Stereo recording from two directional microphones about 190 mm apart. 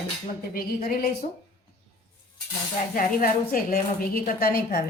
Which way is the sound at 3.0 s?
50° left (ahead or behind).